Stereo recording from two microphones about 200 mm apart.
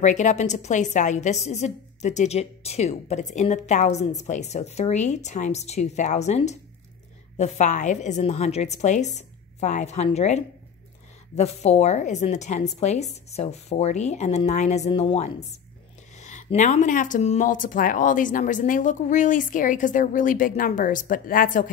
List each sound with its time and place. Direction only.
0.0 s a woman's voice: 35° left (ahead or behind)